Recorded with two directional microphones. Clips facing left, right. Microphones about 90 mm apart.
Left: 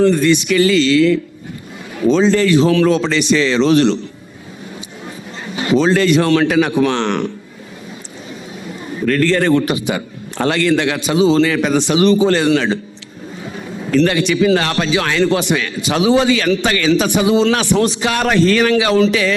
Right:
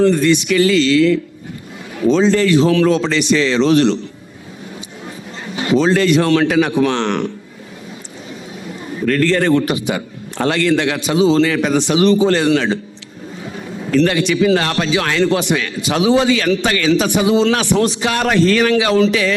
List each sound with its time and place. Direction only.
0.0 s a man's voice: 20° left (ahead or behind)
5.0 s a man's voice: 15° left (ahead or behind)
9.0 s a man's voice: 20° left (ahead or behind)